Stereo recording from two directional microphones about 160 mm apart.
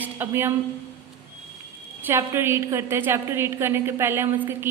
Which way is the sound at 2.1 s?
15° right (ahead or behind).